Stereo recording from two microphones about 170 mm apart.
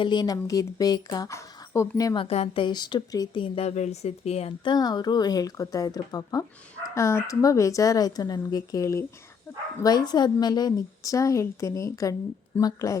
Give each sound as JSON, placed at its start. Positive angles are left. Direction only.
{"t": 0.0, "sound": "speech", "side_deg": 25}
{"t": 2.2, "sound": "speech", "side_deg": 35}